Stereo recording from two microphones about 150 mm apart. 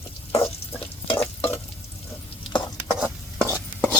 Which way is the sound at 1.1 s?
40° left (ahead or behind).